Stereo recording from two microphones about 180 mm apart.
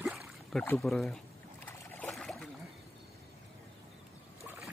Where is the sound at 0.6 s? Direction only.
5° left (ahead or behind).